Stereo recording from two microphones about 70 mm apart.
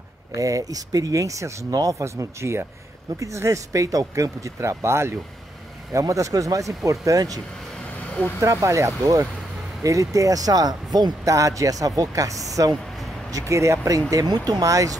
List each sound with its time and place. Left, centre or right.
0.4 s speech: right
5.9 s speech: right
8.4 s speech: right
11.3 s speech: right
14.2 s speech: right